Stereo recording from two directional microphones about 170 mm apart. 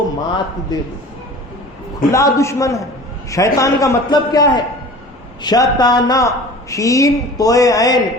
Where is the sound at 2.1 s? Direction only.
20° left (ahead or behind).